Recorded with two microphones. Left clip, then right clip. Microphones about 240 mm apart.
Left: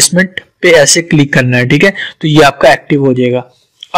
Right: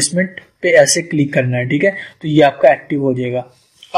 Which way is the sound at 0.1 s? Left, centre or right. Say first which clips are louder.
Left 7 dB; left.